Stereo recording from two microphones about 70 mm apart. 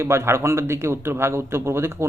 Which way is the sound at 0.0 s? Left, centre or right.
Right.